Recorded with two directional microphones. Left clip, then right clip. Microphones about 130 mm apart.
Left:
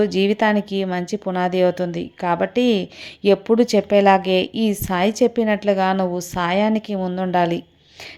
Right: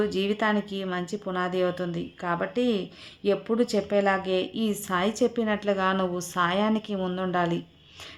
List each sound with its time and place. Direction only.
0.0 s speech: 40° left (ahead or behind)